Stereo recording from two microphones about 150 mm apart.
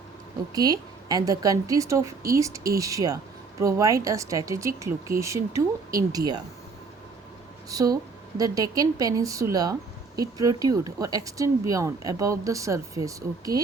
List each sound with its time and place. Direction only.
0.5 s speech: 25° right (ahead or behind)
7.7 s speech: 25° right (ahead or behind)